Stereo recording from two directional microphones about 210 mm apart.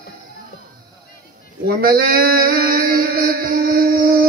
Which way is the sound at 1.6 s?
45° right (ahead or behind).